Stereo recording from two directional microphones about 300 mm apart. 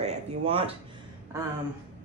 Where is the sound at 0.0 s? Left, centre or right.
Centre.